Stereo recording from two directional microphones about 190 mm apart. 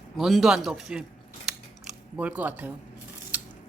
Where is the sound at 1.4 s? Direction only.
5° right (ahead or behind).